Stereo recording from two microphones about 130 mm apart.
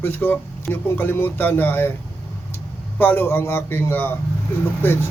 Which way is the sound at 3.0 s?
15° left (ahead or behind).